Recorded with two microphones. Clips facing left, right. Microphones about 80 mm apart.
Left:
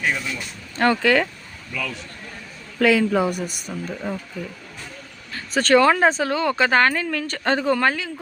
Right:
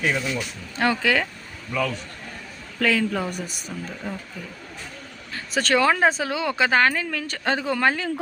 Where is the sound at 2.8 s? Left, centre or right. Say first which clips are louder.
Left 5 dB; centre.